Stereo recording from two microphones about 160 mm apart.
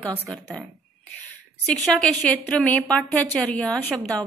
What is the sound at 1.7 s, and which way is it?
A woman's voice, 5° left (ahead or behind).